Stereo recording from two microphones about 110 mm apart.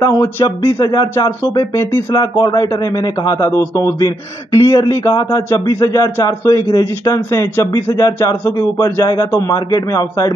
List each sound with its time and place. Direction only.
0.0 s a man's voice: 30° left (ahead or behind)
1.1 s speech: 20° left (ahead or behind)
2.1 s a man's voice: 40° left (ahead or behind)